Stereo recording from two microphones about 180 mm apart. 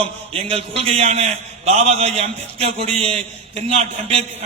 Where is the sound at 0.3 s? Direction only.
30° right (ahead or behind).